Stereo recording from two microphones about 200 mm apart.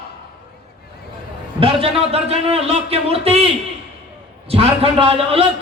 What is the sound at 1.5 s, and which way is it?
A man's voice, 25° right (ahead or behind).